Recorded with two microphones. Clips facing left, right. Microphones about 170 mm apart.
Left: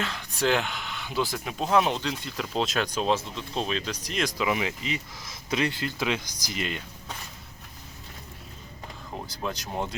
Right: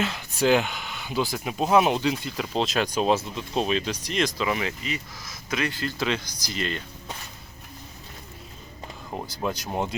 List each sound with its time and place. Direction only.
0.0 s speech: 5° right (ahead or behind)
4.4 s speech: 10° left (ahead or behind)
5.8 s speech: 15° left (ahead or behind)
9.4 s speech: 10° right (ahead or behind)